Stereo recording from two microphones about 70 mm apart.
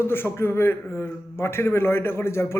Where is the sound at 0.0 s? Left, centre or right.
Left.